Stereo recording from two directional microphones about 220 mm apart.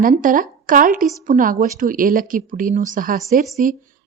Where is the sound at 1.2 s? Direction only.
35° right (ahead or behind).